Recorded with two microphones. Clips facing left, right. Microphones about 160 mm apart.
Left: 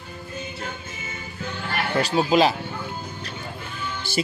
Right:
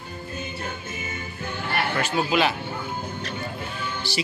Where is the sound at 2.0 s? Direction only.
35° left (ahead or behind).